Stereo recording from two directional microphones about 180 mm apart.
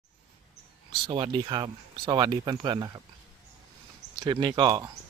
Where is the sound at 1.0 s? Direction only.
25° right (ahead or behind).